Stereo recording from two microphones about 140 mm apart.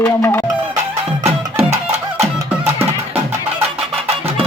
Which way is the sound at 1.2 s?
50° right (ahead or behind).